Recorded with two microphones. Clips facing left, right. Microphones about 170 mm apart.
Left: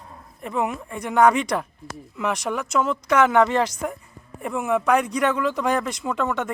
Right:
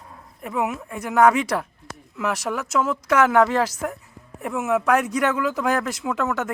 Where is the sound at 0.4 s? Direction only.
5° right (ahead or behind).